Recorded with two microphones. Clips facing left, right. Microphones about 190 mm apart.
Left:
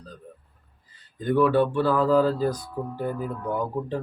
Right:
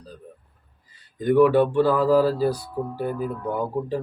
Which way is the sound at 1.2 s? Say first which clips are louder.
Right 4 dB; 15° right (ahead or behind).